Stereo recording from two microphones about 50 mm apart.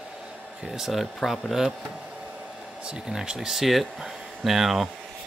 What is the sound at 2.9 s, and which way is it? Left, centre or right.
Speech, centre.